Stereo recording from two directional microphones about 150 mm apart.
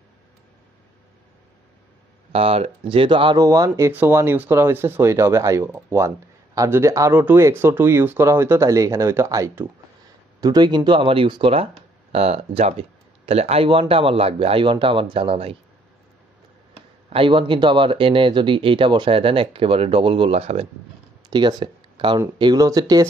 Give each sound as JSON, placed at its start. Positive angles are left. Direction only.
{"t": 2.3, "sound": "speech", "side_deg": -40}
{"t": 3.4, "sound": "speech", "side_deg": -20}
{"t": 17.1, "sound": "speech", "side_deg": -35}
{"t": 21.3, "sound": "speech", "side_deg": -30}